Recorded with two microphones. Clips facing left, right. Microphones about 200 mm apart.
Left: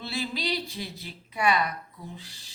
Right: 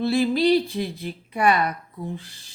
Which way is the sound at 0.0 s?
55° right (ahead or behind).